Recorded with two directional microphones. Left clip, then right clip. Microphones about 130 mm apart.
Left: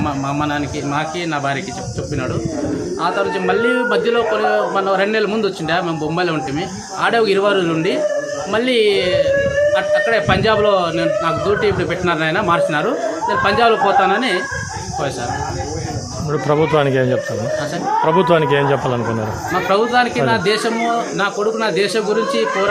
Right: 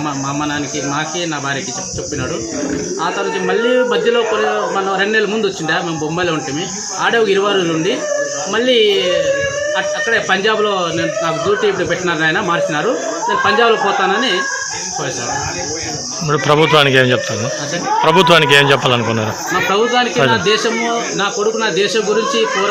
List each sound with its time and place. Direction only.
3.0 s a man's voice: 40° left (ahead or behind)
10.2 s speech: 35° left (ahead or behind)
16.3 s speech: centre (ahead or behind)
19.7 s a man's voice: 40° left (ahead or behind)